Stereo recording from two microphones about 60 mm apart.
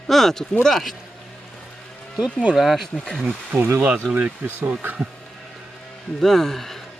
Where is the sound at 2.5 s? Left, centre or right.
Centre.